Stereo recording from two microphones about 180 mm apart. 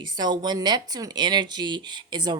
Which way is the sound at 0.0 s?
25° right (ahead or behind).